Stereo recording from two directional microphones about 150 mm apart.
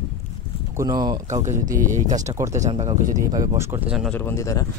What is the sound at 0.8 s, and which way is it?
Speech, 25° right (ahead or behind).